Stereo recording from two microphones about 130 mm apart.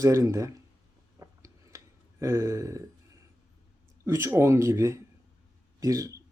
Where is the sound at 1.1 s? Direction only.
25° right (ahead or behind).